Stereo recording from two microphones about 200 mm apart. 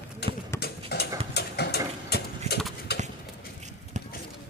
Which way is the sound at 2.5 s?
35° right (ahead or behind).